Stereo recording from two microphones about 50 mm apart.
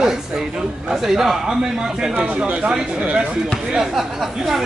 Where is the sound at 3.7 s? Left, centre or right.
Centre.